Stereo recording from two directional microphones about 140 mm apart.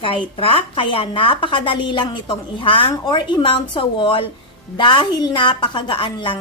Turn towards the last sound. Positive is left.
turn(degrees=35)  # may be behind; listen again after turning